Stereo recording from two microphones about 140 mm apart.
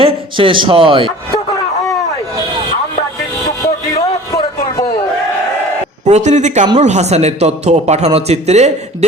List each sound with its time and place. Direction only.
0.0 s a man's voice: 40° right (ahead or behind)
3.9 s a sound: 30° left (ahead or behind)
6.1 s a man's voice: 55° right (ahead or behind)